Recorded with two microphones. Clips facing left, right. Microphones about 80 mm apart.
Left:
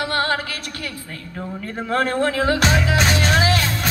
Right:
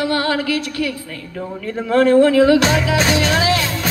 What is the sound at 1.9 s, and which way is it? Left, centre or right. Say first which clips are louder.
Speech: right 9 dB; left.